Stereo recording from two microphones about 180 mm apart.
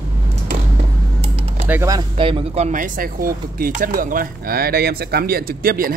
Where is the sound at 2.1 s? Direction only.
30° right (ahead or behind); by 5.9 s 55° right (ahead or behind).